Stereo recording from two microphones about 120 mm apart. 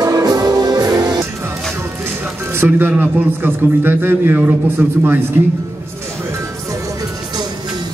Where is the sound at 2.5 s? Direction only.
15° right (ahead or behind).